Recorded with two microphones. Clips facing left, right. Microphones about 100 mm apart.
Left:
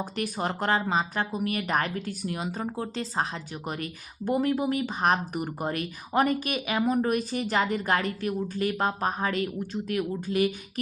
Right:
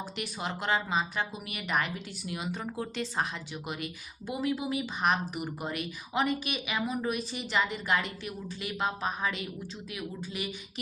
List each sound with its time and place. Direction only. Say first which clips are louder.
0.0 s speech: left 6 dB; 45° left (ahead or behind)